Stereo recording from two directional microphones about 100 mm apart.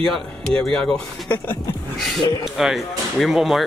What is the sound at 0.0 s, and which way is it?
Speech, 5° left (ahead or behind).